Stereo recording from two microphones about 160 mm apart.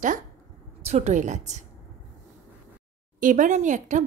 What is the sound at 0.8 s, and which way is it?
Speech, 45° right (ahead or behind).